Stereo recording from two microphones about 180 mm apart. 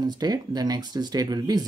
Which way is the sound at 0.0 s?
20° right (ahead or behind).